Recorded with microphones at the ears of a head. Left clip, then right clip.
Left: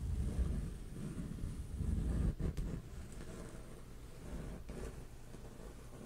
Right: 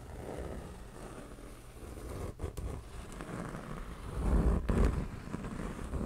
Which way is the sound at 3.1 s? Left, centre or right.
Right.